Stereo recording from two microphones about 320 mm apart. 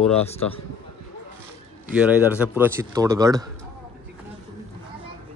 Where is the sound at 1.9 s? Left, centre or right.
Centre.